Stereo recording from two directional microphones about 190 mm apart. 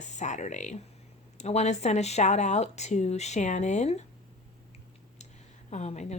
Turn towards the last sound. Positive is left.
turn(degrees=35)  # may be behind; listen again after turning